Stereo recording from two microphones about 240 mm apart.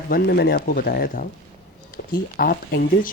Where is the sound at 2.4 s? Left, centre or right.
Left.